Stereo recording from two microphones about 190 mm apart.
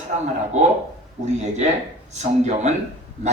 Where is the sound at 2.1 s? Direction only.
35° right (ahead or behind).